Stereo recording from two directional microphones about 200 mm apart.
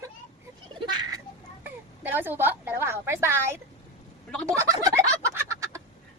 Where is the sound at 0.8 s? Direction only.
20° right (ahead or behind).